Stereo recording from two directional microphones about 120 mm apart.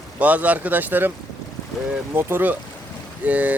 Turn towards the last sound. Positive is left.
turn(degrees=-10)  # may be behind; listen again after turning